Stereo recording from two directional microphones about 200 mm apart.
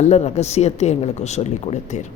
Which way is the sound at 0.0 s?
35° left (ahead or behind).